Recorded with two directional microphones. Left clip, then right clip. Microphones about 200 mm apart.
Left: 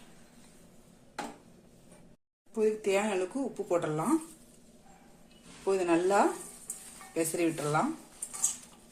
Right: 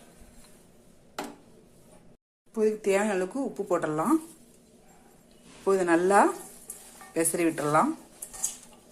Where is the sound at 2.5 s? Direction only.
25° right (ahead or behind).